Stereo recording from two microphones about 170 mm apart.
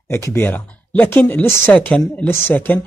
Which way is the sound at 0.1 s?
15° left (ahead or behind).